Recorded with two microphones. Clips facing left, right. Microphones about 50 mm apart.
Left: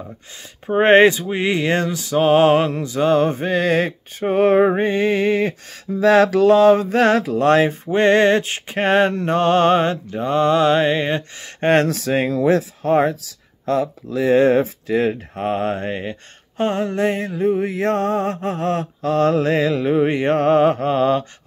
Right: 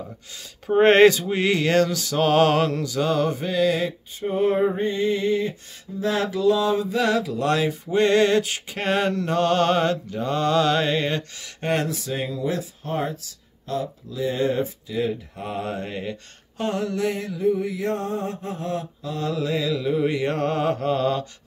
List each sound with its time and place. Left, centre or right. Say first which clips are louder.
0.7 s mantra: left 2 dB; left
4.2 s a sound: left 6 dB; left
11.4 s speech: left 9 dB; left